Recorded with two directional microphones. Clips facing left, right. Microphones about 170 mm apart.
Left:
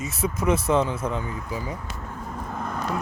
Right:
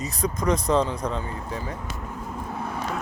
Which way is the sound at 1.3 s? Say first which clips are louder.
Even; 35° right (ahead or behind).